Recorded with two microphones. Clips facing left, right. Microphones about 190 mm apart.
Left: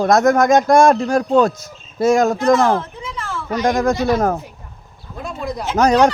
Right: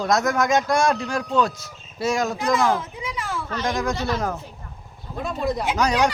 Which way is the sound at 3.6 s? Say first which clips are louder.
Left 9 dB; 45° left (ahead or behind).